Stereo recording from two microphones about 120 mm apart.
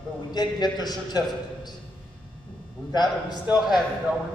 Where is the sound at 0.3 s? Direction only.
35° left (ahead or behind).